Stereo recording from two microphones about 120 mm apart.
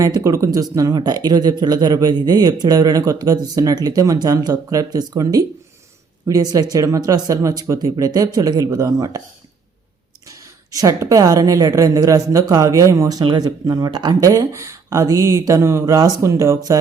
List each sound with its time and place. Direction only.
0.0 s speech: 30° right (ahead or behind)
10.2 s a woman's voice: 30° right (ahead or behind)